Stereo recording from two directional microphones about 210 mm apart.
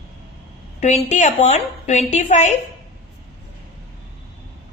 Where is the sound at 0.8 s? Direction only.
30° left (ahead or behind).